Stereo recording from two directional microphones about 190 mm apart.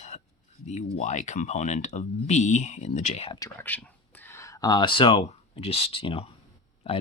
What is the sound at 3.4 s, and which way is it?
Speech, 10° left (ahead or behind).